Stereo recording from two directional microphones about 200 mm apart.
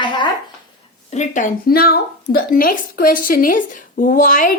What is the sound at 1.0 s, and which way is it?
A woman's voice, 35° left (ahead or behind).